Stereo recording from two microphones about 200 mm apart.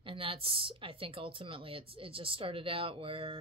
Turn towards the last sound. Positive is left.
turn(degrees=-25)  # may be behind; listen again after turning